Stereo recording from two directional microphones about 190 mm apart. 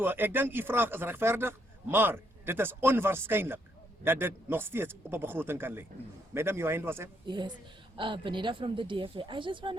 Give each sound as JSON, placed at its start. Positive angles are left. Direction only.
{"t": 0.0, "sound": "a man's voice", "side_deg": -10}
{"t": 7.3, "sound": "speech", "side_deg": -25}